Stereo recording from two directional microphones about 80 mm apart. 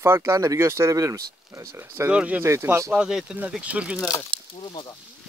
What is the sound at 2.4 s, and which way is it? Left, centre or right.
Speech, right.